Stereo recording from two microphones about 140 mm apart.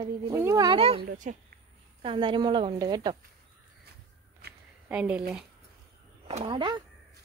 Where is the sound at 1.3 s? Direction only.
60° right (ahead or behind).